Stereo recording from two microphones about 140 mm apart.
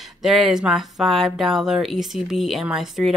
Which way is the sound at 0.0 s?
Centre (ahead or behind).